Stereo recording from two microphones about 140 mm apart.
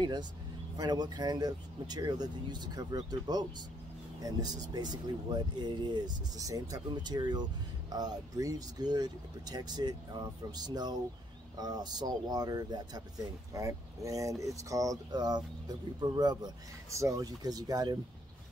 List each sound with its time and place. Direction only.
0.0 s speech: 30° right (ahead or behind)